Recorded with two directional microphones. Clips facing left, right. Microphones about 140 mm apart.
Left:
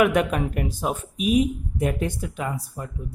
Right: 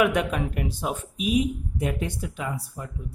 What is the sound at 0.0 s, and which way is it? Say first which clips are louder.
Speech: left 3 dB; 50° left (ahead or behind).